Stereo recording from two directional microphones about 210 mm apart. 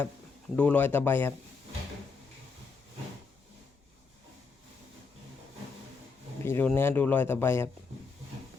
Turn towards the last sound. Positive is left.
turn(degrees=10)  # may be behind; listen again after turning